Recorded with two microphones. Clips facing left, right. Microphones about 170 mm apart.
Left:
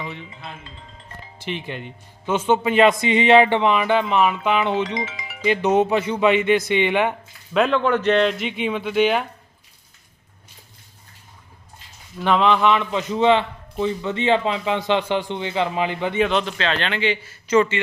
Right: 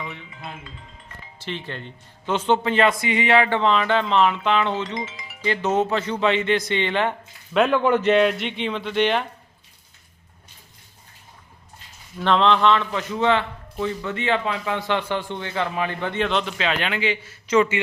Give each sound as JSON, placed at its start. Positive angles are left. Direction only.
{"t": 0.2, "sound": "speech", "side_deg": 30}
{"t": 1.4, "sound": "speech", "side_deg": 15}
{"t": 4.9, "sound": "speech", "side_deg": 75}
{"t": 5.4, "sound": "speech", "side_deg": 15}
{"t": 7.5, "sound": "a man's voice", "side_deg": -5}
{"t": 8.4, "sound": "speech", "side_deg": 10}
{"t": 12.1, "sound": "a man's voice", "side_deg": 10}
{"t": 16.2, "sound": "a man's voice", "side_deg": 5}